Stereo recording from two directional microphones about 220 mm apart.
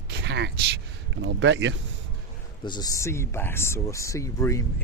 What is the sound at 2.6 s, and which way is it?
Speech, 20° left (ahead or behind).